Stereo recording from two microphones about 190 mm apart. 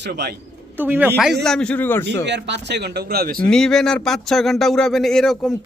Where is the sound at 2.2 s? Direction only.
65° right (ahead or behind).